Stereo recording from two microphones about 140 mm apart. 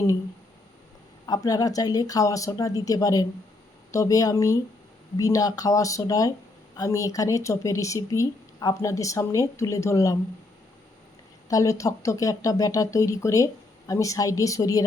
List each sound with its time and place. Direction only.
1.3 s speech: 25° left (ahead or behind)
11.4 s speech: 25° left (ahead or behind)